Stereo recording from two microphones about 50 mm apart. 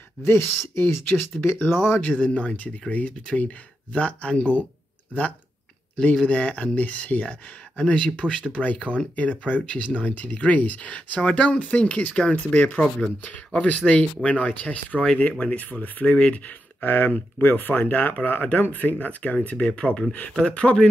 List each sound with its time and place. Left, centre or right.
0.2 s speech: left
2.0 s speech: left
6.2 s speech: left
16.8 s speech: left